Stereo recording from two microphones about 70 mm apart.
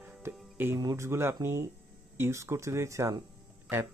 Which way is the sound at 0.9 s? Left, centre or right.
Right.